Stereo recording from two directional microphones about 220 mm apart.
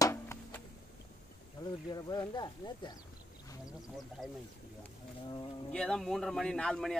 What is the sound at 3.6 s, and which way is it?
Speech, centre (ahead or behind).